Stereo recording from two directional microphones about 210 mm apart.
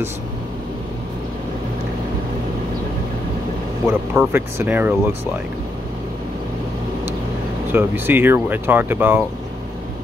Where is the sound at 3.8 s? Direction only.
10° right (ahead or behind).